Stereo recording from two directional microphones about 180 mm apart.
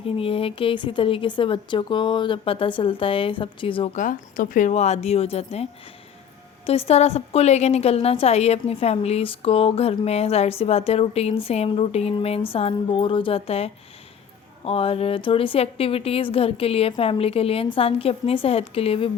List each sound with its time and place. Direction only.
0.0 s speech: 30° left (ahead or behind)
3.9 s a woman's voice: 45° left (ahead or behind)
6.7 s a woman's voice: 35° left (ahead or behind)